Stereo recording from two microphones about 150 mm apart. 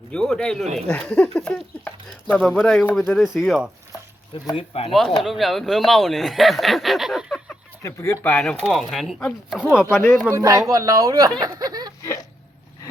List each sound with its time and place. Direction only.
0.1 s speech: 5° left (ahead or behind)
4.5 s speech: 40° left (ahead or behind)
4.9 s speech: centre (ahead or behind)
7.8 s speech: 20° left (ahead or behind)
9.9 s speech: 15° left (ahead or behind)
10.3 s speech: 25° right (ahead or behind)
11.3 s a sound: 25° right (ahead or behind)